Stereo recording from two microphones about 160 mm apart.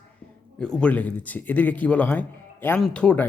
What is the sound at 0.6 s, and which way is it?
Speech, 5° left (ahead or behind).